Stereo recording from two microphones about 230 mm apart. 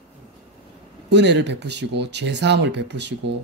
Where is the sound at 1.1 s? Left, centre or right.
Right.